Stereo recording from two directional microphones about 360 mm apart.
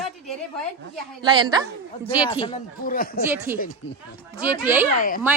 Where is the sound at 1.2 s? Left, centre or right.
Centre.